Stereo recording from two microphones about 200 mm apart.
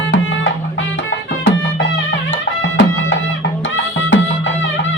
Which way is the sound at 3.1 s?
70° left (ahead or behind).